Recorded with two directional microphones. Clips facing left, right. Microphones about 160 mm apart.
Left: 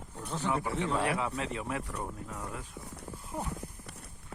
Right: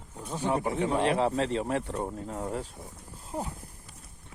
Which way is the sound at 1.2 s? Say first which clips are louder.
Right 8 dB; 35° right (ahead or behind).